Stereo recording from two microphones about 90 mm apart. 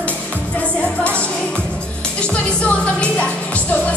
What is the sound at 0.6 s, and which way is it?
Music, 15° left (ahead or behind).